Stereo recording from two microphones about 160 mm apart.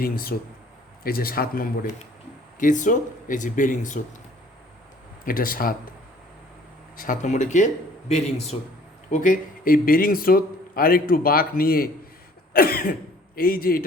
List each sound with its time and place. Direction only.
0.0 s speech: 70° left (ahead or behind)
2.6 s speech: 50° left (ahead or behind)
5.2 s a man's voice: 65° left (ahead or behind)
6.9 s speech: 60° left (ahead or behind); by 8.5 s 40° left (ahead or behind)
9.0 s a man's voice: 55° left (ahead or behind)